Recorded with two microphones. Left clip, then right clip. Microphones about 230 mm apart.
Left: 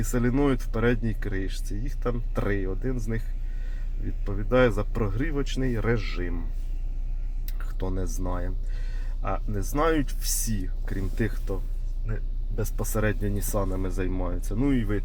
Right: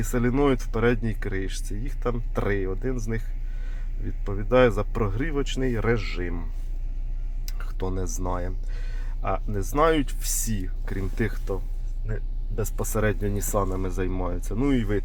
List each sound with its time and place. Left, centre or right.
0.0 s speech: right
4.3 s speech: right
7.8 s speech: right
12.9 s speech: right
14.5 s speech: right